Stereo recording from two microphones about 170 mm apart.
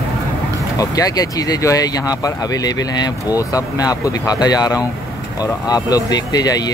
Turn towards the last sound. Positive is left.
turn(degrees=20)  # may be behind; listen again after turning